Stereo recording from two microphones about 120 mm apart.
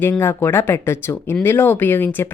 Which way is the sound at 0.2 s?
20° left (ahead or behind).